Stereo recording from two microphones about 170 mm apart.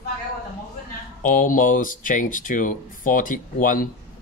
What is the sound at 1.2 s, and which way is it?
Speech, 50° left (ahead or behind).